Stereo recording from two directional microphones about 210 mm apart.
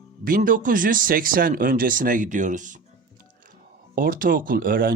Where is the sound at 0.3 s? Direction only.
40° right (ahead or behind).